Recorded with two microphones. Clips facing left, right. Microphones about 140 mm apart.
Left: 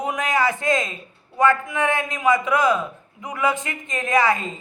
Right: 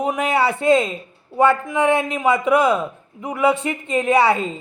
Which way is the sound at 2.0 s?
30° right (ahead or behind).